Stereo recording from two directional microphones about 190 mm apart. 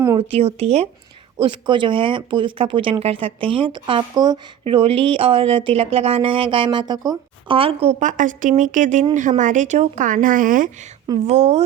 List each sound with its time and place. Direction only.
0.2 s speech: 30° right (ahead or behind)